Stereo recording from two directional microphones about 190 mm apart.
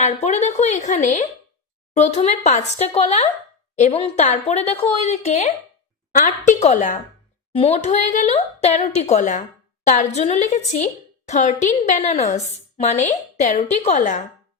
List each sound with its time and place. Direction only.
0.0 s speech: 35° left (ahead or behind)